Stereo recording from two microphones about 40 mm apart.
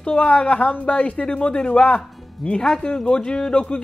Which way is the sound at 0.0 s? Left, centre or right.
Left.